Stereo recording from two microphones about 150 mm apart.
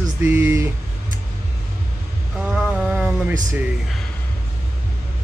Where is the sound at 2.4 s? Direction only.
5° right (ahead or behind).